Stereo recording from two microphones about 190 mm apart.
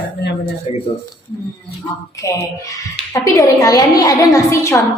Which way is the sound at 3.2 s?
20° left (ahead or behind).